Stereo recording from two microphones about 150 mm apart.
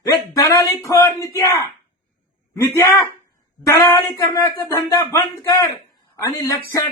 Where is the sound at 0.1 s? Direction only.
25° left (ahead or behind).